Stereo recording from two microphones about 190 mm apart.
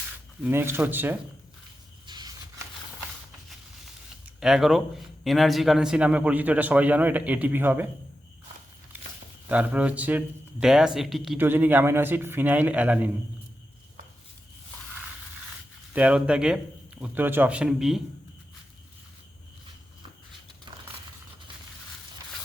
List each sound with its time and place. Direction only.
0.4 s a man's voice: 10° right (ahead or behind)
2.0 s a sound: 20° right (ahead or behind)
4.4 s a man's voice: centre (ahead or behind)
9.5 s a man's voice: 5° right (ahead or behind)
15.9 s a man's voice: 5° right (ahead or behind)